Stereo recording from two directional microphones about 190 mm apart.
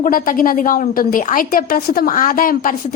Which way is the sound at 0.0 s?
45° left (ahead or behind).